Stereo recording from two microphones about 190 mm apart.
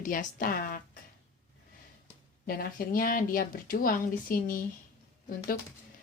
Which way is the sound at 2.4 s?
50° left (ahead or behind).